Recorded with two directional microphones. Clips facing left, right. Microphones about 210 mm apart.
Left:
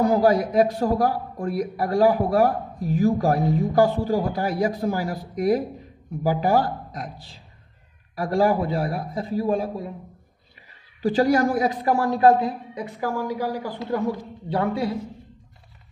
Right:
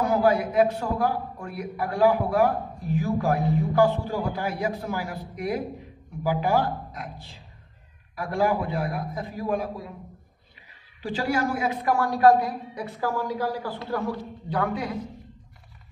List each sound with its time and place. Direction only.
0.0 s a man's voice: 35° left (ahead or behind)
8.2 s a man's voice: 35° left (ahead or behind)
11.0 s a man's voice: 40° left (ahead or behind)